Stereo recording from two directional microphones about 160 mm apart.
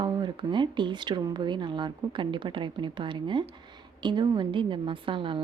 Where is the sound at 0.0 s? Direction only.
30° right (ahead or behind).